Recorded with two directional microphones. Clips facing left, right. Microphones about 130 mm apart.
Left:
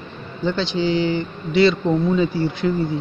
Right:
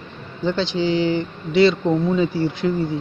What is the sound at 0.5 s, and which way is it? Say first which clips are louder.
A man's voice: even; 20° right (ahead or behind).